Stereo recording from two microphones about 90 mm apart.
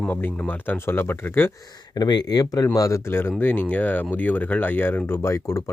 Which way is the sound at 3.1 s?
25° left (ahead or behind).